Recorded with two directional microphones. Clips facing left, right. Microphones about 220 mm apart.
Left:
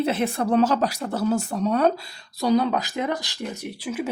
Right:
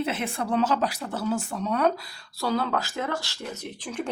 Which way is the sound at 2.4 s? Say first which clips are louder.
Left 6 dB; 15° left (ahead or behind).